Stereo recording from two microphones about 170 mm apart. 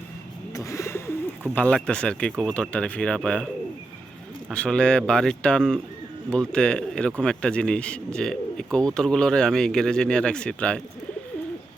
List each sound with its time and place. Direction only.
0.5 s bird: 15° left (ahead or behind)
1.5 s speech: 5° left (ahead or behind)
4.5 s speech: 5° left (ahead or behind)